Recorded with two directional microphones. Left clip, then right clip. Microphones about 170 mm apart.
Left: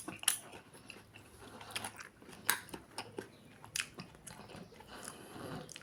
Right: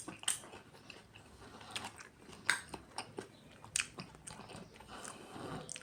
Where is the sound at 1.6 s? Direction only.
15° left (ahead or behind).